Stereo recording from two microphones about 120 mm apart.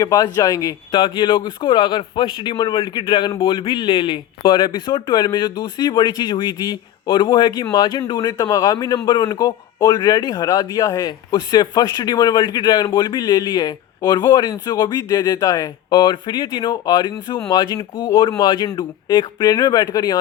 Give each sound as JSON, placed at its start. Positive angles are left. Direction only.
{"t": 0.0, "sound": "speech", "side_deg": 30}
{"t": 9.0, "sound": "speech", "side_deg": 45}